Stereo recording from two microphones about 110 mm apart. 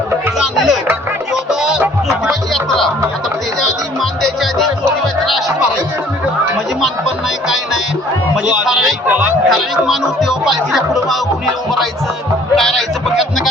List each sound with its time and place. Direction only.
0.3 s music: centre (ahead or behind)
4.0 s music: 5° left (ahead or behind)
8.4 s a sound: 5° right (ahead or behind)
9.0 s chatter: 15° right (ahead or behind)
9.5 s speech: centre (ahead or behind)
12.5 s a man's voice: centre (ahead or behind)